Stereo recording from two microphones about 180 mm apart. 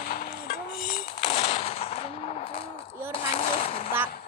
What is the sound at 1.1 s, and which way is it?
Gunshot, 35° left (ahead or behind).